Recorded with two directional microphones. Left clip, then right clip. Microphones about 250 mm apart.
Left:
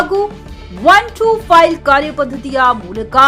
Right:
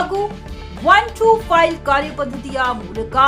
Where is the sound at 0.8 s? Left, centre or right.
Centre.